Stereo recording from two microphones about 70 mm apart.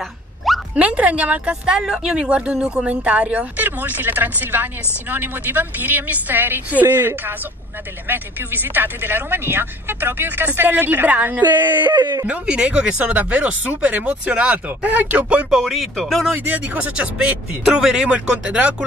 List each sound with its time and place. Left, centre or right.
0.7 s speech: centre
11.8 s speech: right
12.3 s speech: centre
15.6 s speech: centre
16.4 s speech: right